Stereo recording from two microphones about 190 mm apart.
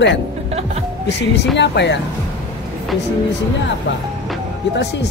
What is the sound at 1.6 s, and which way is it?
Speech, 65° left (ahead or behind).